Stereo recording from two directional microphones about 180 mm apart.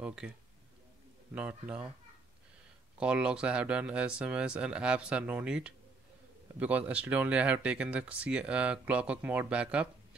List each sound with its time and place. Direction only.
0.0 s speech: 5° right (ahead or behind)
1.3 s speech: 5° right (ahead or behind)
3.0 s speech: 5° right (ahead or behind)